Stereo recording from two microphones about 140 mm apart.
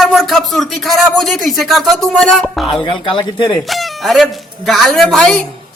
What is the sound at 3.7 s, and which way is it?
A man's voice, centre (ahead or behind).